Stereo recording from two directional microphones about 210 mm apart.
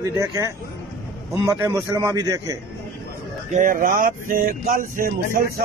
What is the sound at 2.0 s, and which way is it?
Speech, 15° right (ahead or behind).